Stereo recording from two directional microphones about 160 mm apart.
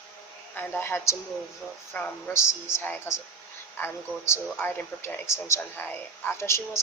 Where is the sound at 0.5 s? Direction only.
10° left (ahead or behind).